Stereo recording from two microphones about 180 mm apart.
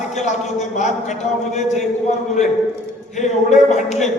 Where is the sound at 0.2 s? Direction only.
40° left (ahead or behind).